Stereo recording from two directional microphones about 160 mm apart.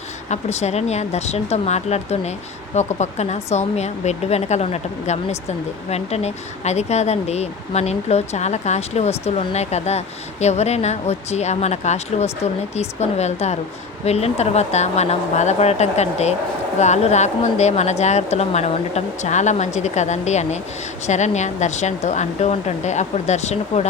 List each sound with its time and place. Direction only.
0.3 s speech: 45° left (ahead or behind)